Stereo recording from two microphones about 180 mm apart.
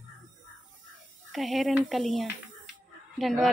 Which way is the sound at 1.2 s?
Centre (ahead or behind).